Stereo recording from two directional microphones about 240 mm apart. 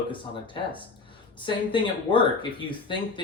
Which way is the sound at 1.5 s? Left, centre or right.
Centre.